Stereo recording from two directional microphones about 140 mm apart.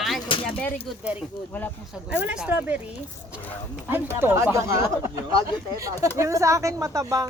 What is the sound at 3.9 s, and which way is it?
Speech, 15° right (ahead or behind).